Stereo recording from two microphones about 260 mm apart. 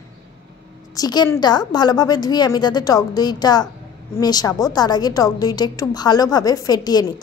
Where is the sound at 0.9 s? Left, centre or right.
Centre.